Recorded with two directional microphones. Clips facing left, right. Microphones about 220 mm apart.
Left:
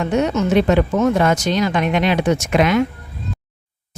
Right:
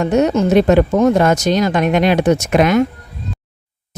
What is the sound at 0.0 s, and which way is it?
Speech, 40° right (ahead or behind).